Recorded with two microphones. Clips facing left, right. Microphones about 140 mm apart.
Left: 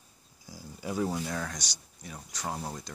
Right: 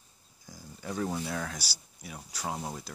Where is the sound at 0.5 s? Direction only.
10° left (ahead or behind).